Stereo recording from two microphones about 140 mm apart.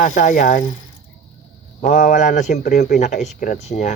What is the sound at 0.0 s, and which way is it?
Speech, 65° left (ahead or behind).